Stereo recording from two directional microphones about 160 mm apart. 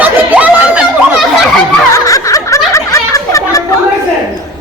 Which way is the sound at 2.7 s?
20° left (ahead or behind).